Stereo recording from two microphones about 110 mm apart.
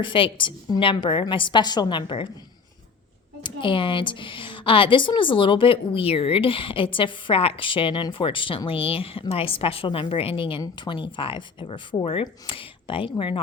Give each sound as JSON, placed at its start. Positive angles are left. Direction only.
{"t": 0.0, "sound": "a woman's voice", "side_deg": 50}
{"t": 3.4, "sound": "a woman's voice", "side_deg": 50}